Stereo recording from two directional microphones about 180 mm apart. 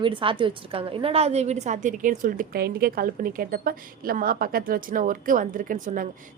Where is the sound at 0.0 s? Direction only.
30° right (ahead or behind).